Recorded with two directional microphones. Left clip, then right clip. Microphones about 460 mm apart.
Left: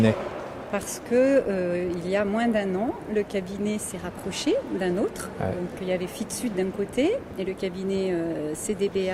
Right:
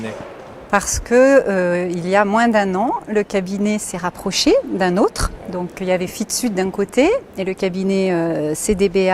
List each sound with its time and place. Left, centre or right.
0.7 s speech: right